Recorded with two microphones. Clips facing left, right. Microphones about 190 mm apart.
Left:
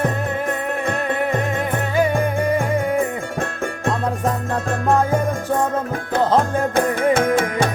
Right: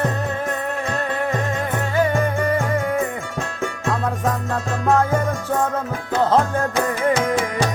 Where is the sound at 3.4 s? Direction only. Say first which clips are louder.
Left 2 dB; 55° left (ahead or behind).